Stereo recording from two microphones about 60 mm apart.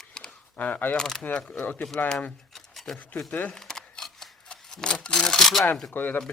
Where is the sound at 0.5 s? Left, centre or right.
Left.